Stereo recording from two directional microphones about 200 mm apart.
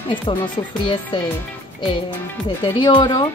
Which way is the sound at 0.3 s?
25° left (ahead or behind).